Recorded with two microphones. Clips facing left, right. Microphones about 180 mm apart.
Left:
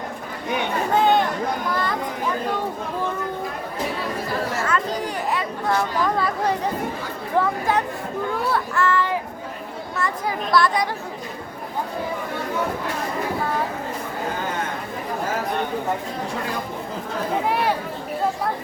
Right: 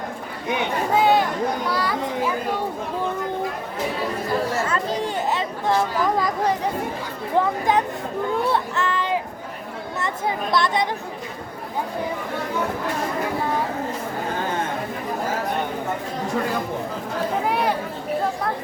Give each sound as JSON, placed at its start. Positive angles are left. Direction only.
{"t": 0.9, "sound": "a sound", "side_deg": -5}
{"t": 1.7, "sound": "children playing", "side_deg": -10}
{"t": 4.7, "sound": "chatter", "side_deg": -25}
{"t": 7.3, "sound": "a child's voice", "side_deg": -20}